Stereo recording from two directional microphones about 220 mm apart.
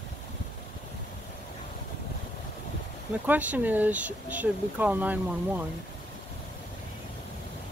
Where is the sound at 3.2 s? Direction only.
10° right (ahead or behind).